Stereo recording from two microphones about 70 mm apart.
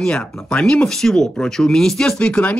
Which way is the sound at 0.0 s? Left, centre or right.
Centre.